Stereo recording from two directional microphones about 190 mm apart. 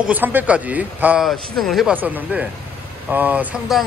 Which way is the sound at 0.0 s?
10° right (ahead or behind).